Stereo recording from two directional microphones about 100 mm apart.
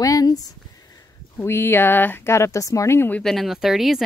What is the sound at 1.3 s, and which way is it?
Speech, 25° left (ahead or behind).